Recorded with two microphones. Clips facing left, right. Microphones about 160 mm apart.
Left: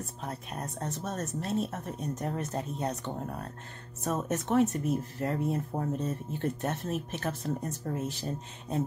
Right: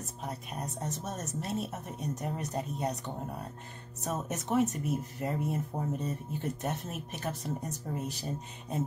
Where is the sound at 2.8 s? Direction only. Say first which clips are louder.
Left 1 dB; 10° right (ahead or behind).